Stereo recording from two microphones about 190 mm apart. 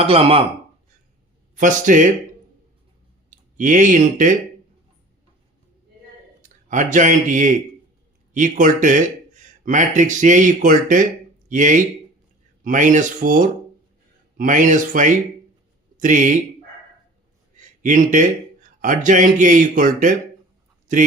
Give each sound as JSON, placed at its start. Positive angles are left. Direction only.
{"t": 0.0, "sound": "speech", "side_deg": -30}
{"t": 1.5, "sound": "speech", "side_deg": -40}
{"t": 3.2, "sound": "speech", "side_deg": -40}
{"t": 6.4, "sound": "speech", "side_deg": -40}
{"t": 17.6, "sound": "speech", "side_deg": -40}